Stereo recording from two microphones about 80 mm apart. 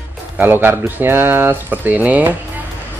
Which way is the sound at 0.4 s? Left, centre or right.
Right.